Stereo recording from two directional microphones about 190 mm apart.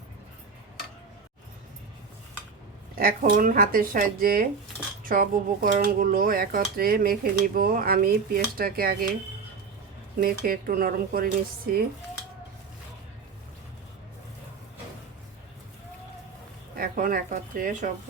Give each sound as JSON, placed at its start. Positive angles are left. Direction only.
{"t": 2.9, "sound": "speech", "side_deg": -45}
{"t": 10.2, "sound": "speech", "side_deg": -50}
{"t": 16.7, "sound": "speech", "side_deg": -50}